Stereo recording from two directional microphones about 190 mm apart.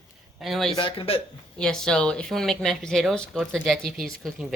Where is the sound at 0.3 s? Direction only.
Centre (ahead or behind).